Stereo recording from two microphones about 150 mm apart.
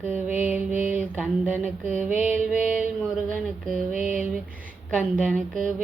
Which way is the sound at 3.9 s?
60° right (ahead or behind).